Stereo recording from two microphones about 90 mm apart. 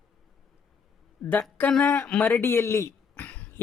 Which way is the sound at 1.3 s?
20° left (ahead or behind).